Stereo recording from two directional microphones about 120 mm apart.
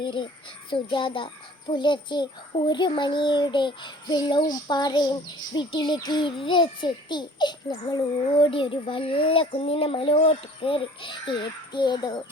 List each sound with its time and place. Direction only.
0.0 s a child's voice: 45° left (ahead or behind)
8.4 s a child's voice: 50° left (ahead or behind)